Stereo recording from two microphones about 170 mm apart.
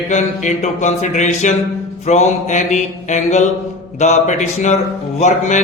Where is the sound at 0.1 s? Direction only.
45° left (ahead or behind).